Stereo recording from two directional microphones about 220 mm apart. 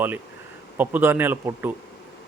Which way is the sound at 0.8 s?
10° right (ahead or behind).